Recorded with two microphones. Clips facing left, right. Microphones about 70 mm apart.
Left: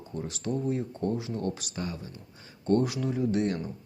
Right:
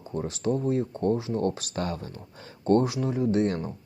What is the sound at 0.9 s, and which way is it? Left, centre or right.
Speech, right.